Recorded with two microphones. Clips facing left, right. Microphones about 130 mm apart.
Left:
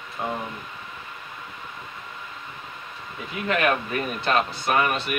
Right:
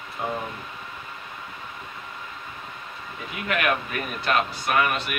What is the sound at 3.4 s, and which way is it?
Speech, 30° left (ahead or behind).